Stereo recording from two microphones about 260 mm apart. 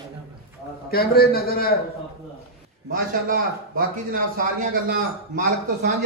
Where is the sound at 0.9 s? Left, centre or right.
Left.